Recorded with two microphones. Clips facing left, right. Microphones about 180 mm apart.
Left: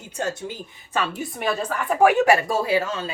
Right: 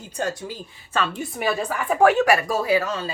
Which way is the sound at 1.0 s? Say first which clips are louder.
Right 1 dB; 10° left (ahead or behind).